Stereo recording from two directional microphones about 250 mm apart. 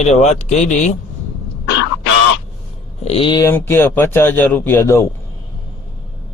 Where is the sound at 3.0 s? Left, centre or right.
Left.